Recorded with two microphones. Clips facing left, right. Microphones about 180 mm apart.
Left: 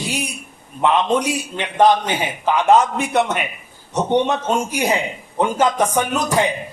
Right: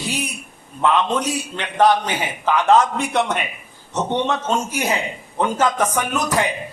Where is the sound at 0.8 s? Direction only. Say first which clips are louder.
Left 2 dB; 20° left (ahead or behind).